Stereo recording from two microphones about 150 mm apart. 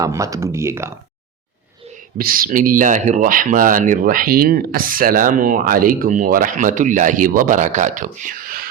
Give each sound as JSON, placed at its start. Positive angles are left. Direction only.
{"t": 0.0, "sound": "speech", "side_deg": -20}
{"t": 2.1, "sound": "speech", "side_deg": -75}